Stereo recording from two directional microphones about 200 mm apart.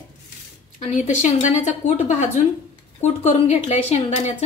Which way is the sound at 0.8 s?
35° left (ahead or behind).